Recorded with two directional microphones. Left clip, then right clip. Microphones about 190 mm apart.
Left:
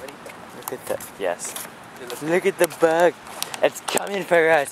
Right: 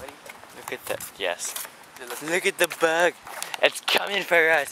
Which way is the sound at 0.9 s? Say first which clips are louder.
Left 3 dB; 20° right (ahead or behind).